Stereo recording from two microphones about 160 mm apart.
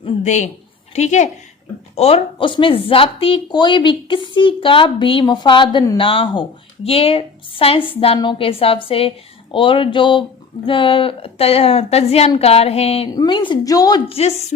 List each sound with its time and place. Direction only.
0.0 s a woman's voice: 45° left (ahead or behind)
13.1 s a woman's voice: 30° left (ahead or behind)
14.1 s speech: 40° left (ahead or behind)